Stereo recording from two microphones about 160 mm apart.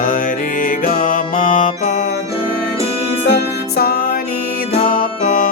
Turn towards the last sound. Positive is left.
turn(degrees=55)  # may be behind; listen again after turning